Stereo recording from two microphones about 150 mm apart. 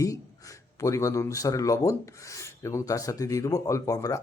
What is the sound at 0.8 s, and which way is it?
Rub, 20° left (ahead or behind).